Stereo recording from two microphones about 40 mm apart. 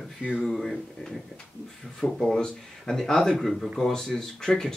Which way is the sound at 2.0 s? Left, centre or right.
Centre.